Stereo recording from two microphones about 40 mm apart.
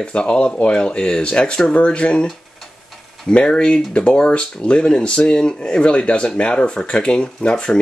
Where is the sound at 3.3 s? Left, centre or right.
Left.